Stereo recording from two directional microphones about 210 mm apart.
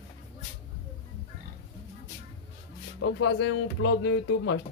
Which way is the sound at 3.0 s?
60° left (ahead or behind).